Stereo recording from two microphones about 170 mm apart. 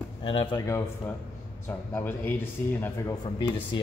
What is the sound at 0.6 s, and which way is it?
A man's voice, 15° left (ahead or behind).